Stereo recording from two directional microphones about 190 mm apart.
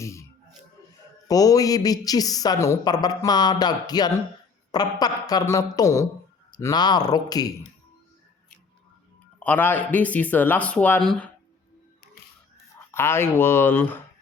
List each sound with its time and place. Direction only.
0.0 s music: 15° left (ahead or behind)
1.3 s a woman's voice: 20° left (ahead or behind)
9.4 s speech: 10° left (ahead or behind)
12.9 s speech: 10° left (ahead or behind)